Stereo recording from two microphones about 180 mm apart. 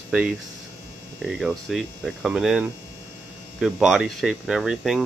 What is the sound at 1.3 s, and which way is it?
Speech, centre (ahead or behind).